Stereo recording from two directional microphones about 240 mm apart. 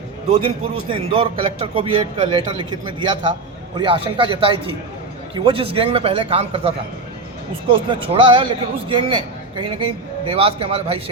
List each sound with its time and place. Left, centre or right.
0.3 s a man's voice: right